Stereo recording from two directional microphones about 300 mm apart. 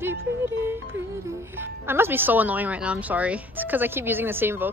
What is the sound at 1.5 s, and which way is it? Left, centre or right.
Speech, centre.